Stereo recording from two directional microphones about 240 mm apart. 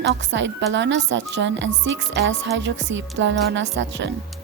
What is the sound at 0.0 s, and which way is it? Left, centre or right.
Speech, right.